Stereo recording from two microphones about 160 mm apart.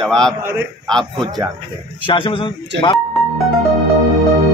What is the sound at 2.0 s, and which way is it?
Speech, 30° left (ahead or behind).